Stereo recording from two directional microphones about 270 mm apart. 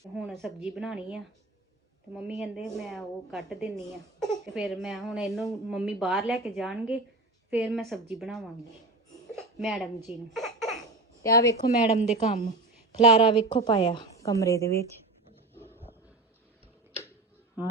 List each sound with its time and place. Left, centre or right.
0.2 s speech: centre
9.3 s a sound: centre
10.1 s baby laughter: centre
11.2 s a woman's voice: centre
11.9 s a woman's voice: left